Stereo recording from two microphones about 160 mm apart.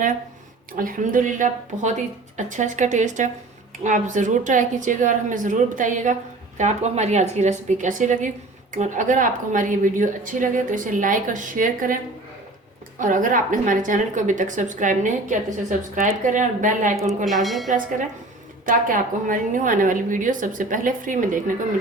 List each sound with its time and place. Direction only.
0.7 s a woman's voice: 60° right (ahead or behind)
13.0 s speech: 55° right (ahead or behind)
17.2 s speech: centre (ahead or behind)
18.6 s a woman's voice: 60° right (ahead or behind)